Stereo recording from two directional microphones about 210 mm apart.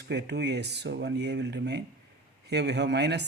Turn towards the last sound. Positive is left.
turn(degrees=-55)  # may be behind; listen again after turning